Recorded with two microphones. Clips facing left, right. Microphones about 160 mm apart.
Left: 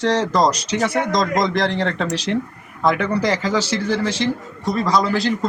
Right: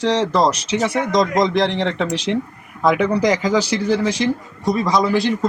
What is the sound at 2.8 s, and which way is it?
A man's voice, 10° right (ahead or behind).